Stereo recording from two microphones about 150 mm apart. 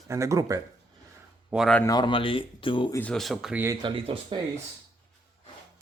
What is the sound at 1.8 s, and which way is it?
Speech, 30° left (ahead or behind).